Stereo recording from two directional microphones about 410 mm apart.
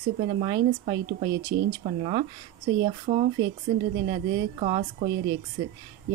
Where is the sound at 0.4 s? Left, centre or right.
Centre.